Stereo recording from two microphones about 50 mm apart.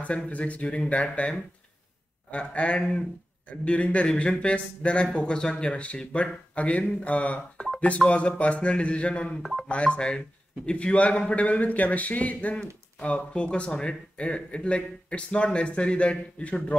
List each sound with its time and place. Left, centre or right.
0.0 s a man's voice: left